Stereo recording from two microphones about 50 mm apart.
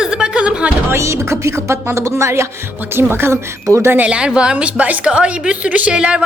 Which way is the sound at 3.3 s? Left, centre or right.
Right.